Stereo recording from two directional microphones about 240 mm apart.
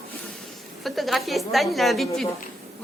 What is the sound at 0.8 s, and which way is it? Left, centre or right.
A woman's voice, centre.